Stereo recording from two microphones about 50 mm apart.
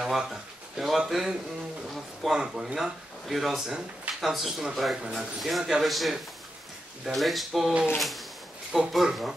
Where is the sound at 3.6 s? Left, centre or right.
Centre.